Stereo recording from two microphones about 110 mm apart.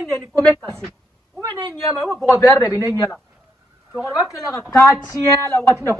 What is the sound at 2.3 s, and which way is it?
Speech, 30° left (ahead or behind).